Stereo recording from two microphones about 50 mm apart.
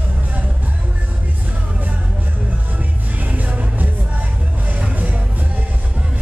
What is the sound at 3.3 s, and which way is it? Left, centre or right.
Music, right.